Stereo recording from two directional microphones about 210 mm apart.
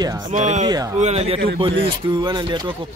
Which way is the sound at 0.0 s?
20° right (ahead or behind).